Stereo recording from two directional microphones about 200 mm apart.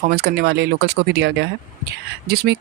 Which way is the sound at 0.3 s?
55° right (ahead or behind).